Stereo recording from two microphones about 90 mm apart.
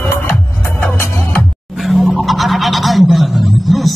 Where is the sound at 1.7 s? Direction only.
Centre (ahead or behind).